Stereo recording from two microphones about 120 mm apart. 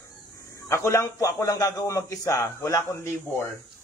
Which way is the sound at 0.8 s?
25° left (ahead or behind).